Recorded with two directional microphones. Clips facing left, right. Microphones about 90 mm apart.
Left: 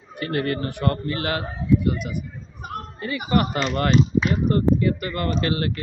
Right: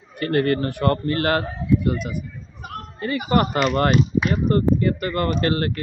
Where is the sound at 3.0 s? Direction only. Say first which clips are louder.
Right 2 dB; 40° right (ahead or behind).